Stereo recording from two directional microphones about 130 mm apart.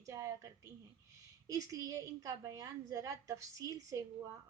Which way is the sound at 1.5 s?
25° right (ahead or behind).